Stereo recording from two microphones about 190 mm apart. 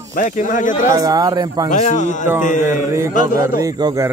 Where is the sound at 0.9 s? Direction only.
20° right (ahead or behind).